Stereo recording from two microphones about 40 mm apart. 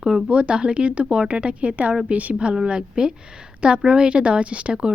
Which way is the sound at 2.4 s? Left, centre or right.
Right.